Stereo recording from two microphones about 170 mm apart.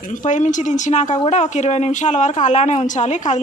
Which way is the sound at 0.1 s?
50° left (ahead or behind).